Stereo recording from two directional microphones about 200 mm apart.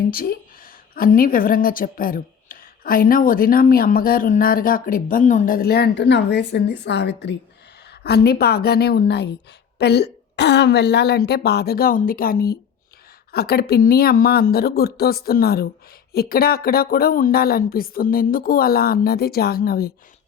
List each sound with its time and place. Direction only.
0.1 s a woman's voice: 45° left (ahead or behind)